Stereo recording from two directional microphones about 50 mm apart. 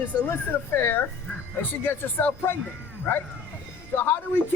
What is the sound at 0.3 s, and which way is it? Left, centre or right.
A man's voice, left.